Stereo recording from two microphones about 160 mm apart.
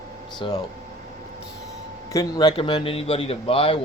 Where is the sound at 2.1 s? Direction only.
25° left (ahead or behind).